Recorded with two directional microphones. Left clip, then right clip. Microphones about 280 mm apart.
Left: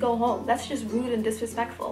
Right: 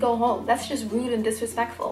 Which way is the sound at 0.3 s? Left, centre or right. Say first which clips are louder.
Right 2 dB; centre.